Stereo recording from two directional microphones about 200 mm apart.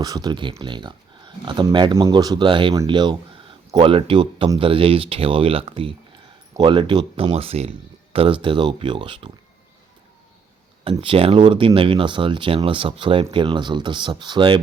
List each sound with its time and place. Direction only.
0.0 s speech: 20° right (ahead or behind)
10.8 s speech: 25° right (ahead or behind)